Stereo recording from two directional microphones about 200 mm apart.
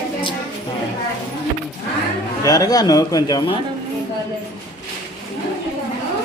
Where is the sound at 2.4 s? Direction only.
20° left (ahead or behind).